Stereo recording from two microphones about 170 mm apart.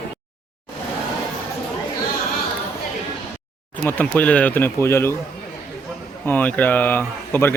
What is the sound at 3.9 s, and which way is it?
Speech, 10° left (ahead or behind).